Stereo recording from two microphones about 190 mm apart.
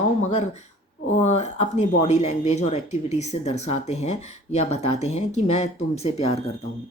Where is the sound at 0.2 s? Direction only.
35° left (ahead or behind).